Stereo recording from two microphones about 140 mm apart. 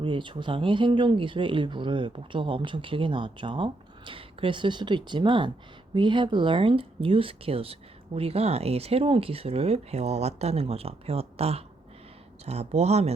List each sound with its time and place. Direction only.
0.0 s speech: 35° right (ahead or behind)